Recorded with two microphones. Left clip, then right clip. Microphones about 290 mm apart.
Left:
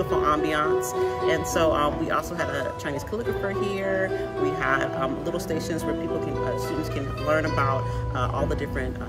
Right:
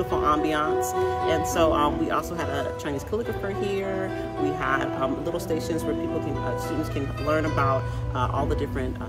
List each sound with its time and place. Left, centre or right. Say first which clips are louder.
0.1 s speech: even; centre
3.6 s speech: left 2 dB; centre
7.2 s speech: even; centre